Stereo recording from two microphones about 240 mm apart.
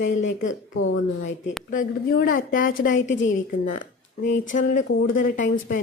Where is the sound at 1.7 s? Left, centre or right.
Left.